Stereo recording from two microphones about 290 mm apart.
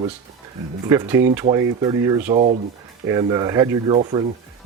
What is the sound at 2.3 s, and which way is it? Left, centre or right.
Speech, right.